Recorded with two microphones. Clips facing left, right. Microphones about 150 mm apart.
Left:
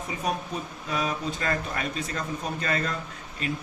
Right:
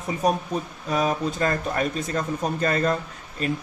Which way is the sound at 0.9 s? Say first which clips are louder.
Right 6 dB; 45° right (ahead or behind).